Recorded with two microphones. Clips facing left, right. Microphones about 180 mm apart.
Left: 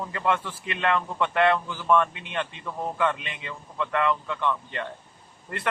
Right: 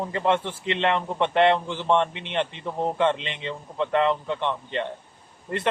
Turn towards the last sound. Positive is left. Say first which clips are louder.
# right 6 dB
turn(degrees=-25)  # may be behind; listen again after turning